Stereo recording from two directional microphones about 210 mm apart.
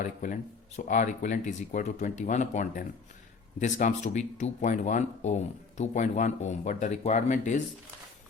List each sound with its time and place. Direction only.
0.0 s speech: 40° left (ahead or behind)